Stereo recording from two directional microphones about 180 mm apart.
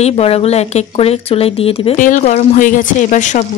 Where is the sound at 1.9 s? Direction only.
45° left (ahead or behind).